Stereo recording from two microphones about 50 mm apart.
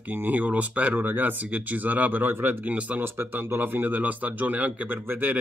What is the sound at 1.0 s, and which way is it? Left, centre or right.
Speech, right.